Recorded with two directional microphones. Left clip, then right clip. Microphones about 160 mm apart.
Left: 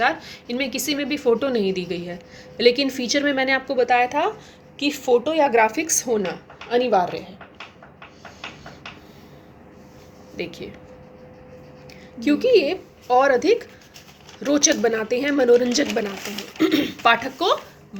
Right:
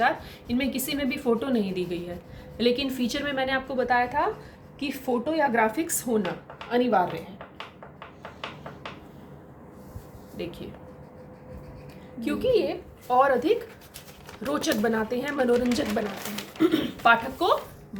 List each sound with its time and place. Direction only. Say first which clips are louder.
0.0 s a woman's voice: left 3 dB; 40° left (ahead or behind)
10.3 s a woman's voice: left 5 dB; 35° left (ahead or behind)
12.2 s a woman's voice: left 7 dB; 35° left (ahead or behind)